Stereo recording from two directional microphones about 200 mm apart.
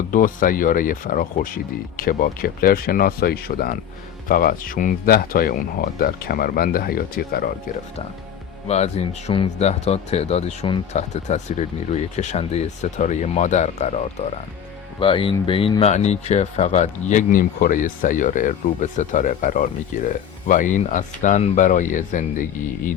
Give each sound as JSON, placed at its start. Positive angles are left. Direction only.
{"t": 0.1, "sound": "speech", "side_deg": 40}
{"t": 8.6, "sound": "speech", "side_deg": 30}